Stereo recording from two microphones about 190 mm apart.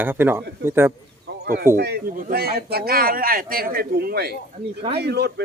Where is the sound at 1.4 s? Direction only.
50° right (ahead or behind).